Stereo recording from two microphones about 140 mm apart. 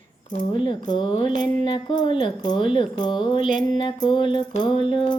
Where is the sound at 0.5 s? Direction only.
35° left (ahead or behind).